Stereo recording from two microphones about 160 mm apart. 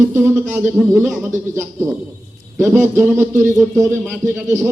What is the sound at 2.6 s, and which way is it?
A man's voice, 15° right (ahead or behind).